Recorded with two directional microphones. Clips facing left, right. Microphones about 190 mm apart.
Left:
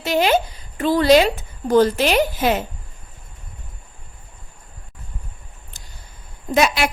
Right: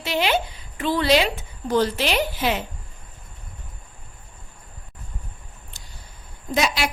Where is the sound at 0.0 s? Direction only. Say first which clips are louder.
Left 5 dB; 45° left (ahead or behind).